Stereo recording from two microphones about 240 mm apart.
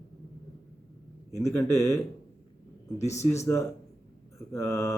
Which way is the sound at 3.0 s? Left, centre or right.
Left.